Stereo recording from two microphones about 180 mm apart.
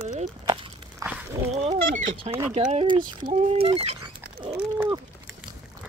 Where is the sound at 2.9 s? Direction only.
25° right (ahead or behind).